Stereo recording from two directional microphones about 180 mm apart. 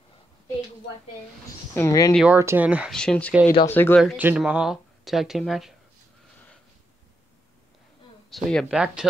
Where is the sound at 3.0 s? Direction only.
5° left (ahead or behind).